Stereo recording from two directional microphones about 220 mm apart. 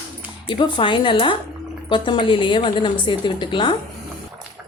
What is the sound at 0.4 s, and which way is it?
A woman's voice, 20° left (ahead or behind).